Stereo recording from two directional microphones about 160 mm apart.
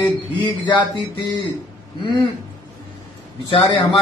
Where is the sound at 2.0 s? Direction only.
25° left (ahead or behind).